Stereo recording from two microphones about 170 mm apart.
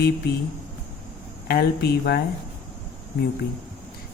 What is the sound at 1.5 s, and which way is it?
Speech, 70° left (ahead or behind).